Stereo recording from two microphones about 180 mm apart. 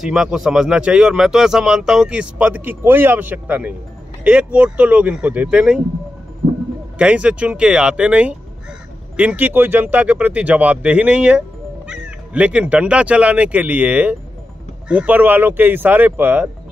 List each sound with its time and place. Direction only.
0.0 s speech: centre (ahead or behind)
7.0 s speech: 5° right (ahead or behind)